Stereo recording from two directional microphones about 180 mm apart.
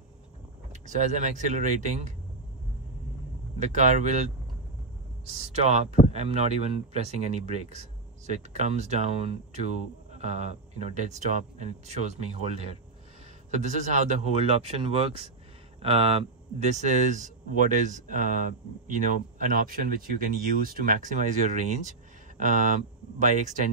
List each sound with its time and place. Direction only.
0.8 s speech: 40° right (ahead or behind)
3.5 s speech: 40° right (ahead or behind)
23.1 s speech: 45° right (ahead or behind)